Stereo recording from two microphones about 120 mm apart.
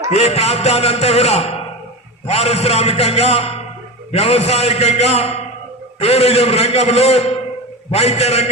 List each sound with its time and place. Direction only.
0.1 s a man's voice: 65° left (ahead or behind)